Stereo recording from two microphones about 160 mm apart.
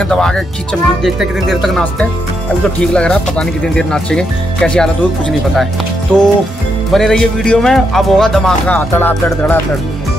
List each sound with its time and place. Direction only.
0.0 s speech: 5° left (ahead or behind)
6.1 s music: 5° left (ahead or behind)
6.9 s speech: 5° left (ahead or behind)
8.7 s music: 15° left (ahead or behind)